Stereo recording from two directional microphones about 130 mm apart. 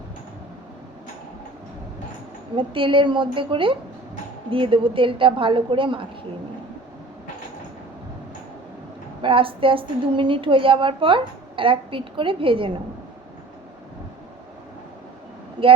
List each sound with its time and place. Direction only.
2.6 s a woman's voice: 40° right (ahead or behind)
9.2 s a woman's voice: 45° right (ahead or behind)
15.6 s speech: 40° right (ahead or behind)